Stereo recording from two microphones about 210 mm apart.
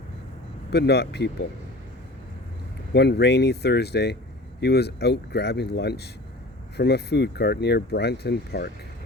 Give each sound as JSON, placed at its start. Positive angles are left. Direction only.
{"t": 0.7, "sound": "speech", "side_deg": 50}
{"t": 2.9, "sound": "speech", "side_deg": 55}